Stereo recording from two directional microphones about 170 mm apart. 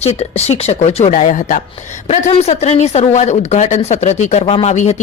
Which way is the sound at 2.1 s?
40° left (ahead or behind).